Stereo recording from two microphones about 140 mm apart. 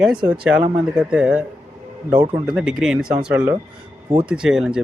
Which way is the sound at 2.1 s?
30° right (ahead or behind).